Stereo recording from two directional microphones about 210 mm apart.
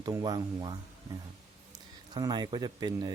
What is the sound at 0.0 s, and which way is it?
Speech, 20° right (ahead or behind).